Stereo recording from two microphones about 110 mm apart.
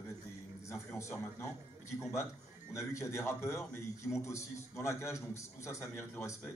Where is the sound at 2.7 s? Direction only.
25° left (ahead or behind).